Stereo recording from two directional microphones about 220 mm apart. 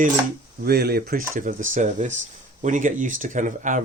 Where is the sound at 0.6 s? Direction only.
45° right (ahead or behind).